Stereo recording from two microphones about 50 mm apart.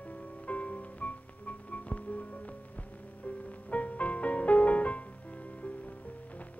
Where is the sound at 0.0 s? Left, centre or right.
Left.